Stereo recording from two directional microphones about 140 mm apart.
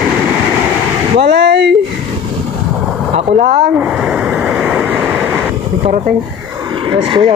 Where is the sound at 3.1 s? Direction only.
50° right (ahead or behind).